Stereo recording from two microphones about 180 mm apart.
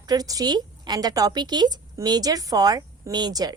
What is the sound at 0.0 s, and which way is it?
Speech, 20° right (ahead or behind).